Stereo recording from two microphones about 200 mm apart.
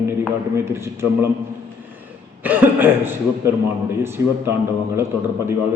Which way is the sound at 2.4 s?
10° right (ahead or behind).